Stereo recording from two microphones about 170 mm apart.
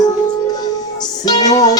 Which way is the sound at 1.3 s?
25° left (ahead or behind).